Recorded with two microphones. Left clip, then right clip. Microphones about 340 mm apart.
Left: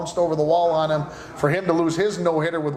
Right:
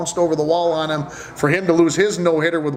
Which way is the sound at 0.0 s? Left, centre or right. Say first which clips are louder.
Right 3 dB; right.